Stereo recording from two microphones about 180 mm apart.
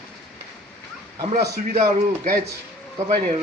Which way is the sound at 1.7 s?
45° right (ahead or behind).